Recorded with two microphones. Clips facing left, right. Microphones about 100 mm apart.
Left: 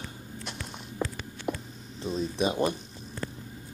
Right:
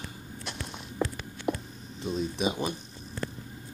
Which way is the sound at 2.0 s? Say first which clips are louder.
Left 1 dB; 5° right (ahead or behind).